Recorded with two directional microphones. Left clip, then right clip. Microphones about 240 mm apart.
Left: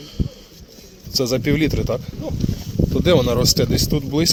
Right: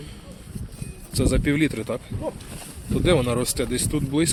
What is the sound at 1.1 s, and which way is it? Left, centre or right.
Speech, centre.